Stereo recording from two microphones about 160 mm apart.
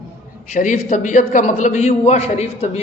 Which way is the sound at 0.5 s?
50° left (ahead or behind).